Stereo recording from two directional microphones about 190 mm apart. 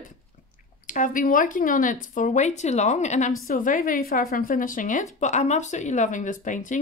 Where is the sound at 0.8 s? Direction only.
45° left (ahead or behind).